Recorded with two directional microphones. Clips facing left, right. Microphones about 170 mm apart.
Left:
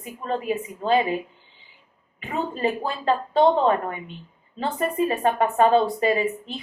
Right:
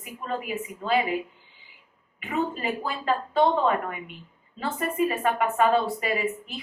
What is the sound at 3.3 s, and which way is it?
A woman's voice, 30° left (ahead or behind).